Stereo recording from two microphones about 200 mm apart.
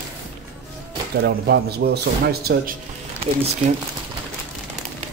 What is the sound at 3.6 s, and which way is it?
Speech, 35° right (ahead or behind).